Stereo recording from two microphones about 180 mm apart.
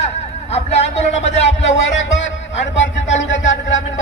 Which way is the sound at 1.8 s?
85° left.